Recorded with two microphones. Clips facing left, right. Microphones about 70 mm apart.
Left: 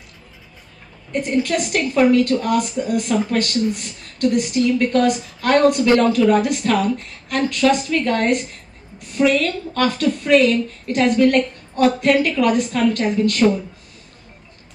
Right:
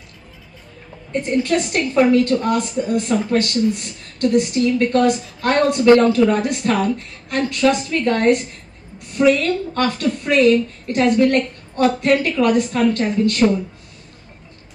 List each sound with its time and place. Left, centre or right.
1.1 s a woman's voice: right